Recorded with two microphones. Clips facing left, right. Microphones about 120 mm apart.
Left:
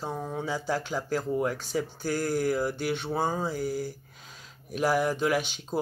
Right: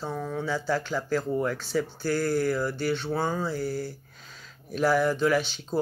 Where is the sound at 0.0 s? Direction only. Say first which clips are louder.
Right 1 dB; 25° left (ahead or behind).